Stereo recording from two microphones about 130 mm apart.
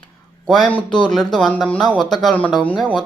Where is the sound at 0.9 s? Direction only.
5° left (ahead or behind).